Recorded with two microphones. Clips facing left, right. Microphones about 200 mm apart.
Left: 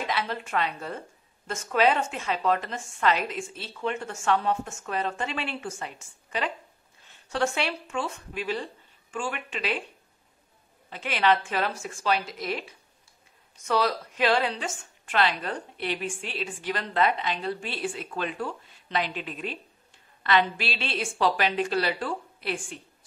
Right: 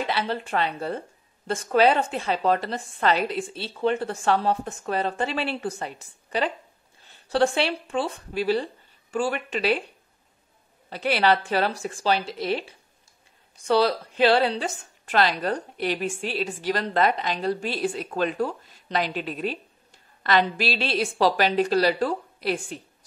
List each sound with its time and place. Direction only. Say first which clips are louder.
0.0 s a woman's voice: right 3 dB; 30° right (ahead or behind)
10.9 s a woman's voice: right 3 dB; 35° right (ahead or behind)